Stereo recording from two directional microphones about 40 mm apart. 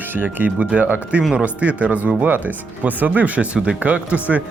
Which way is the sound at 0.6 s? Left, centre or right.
Right.